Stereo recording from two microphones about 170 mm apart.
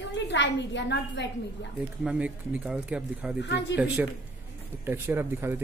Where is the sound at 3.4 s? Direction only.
90° left.